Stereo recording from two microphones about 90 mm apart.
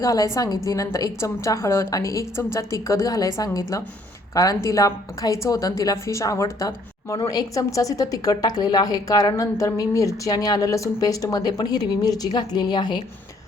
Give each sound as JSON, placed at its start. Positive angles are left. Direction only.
{"t": 0.0, "sound": "a woman's voice", "side_deg": 35}